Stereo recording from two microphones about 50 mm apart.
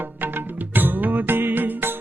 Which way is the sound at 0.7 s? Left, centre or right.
Right.